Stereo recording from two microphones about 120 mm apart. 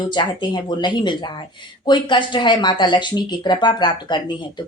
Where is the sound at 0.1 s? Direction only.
40° left (ahead or behind).